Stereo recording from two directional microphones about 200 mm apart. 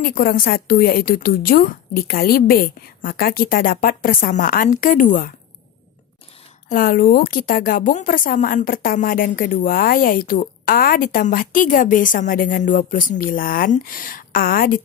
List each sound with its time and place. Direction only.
0.0 s speech: 45° left (ahead or behind)
6.7 s speech: 45° left (ahead or behind)